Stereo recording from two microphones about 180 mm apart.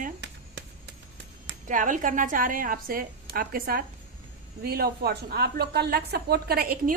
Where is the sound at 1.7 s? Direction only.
45° right (ahead or behind).